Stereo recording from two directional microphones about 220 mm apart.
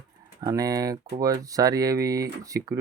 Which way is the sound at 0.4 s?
15° right (ahead or behind).